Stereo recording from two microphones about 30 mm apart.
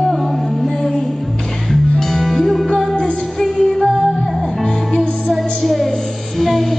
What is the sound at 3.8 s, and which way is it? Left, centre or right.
Music, centre.